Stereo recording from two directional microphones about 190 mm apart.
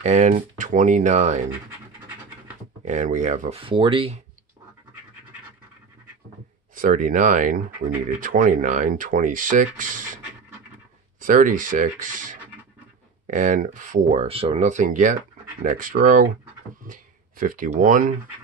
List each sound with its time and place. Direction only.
0.0 s speech: 40° right (ahead or behind)
2.8 s speech: 40° right (ahead or behind)
6.7 s speech: 45° right (ahead or behind)